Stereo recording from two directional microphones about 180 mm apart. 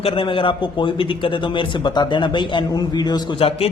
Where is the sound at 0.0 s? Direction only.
30° left (ahead or behind).